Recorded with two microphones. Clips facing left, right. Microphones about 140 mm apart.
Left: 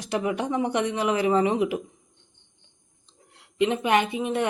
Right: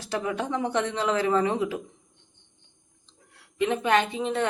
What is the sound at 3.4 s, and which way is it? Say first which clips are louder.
A woman's voice: left 2 dB; 15° left (ahead or behind).